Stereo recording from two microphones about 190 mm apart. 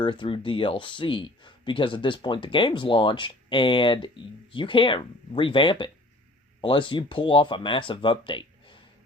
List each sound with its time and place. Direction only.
0.0 s speech: 25° left (ahead or behind)